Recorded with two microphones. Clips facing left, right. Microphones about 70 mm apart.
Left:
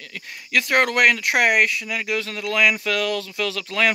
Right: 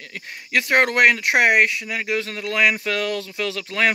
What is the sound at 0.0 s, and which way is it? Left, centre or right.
Speech, right.